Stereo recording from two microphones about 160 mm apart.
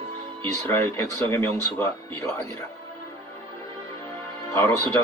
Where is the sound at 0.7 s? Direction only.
15° left (ahead or behind).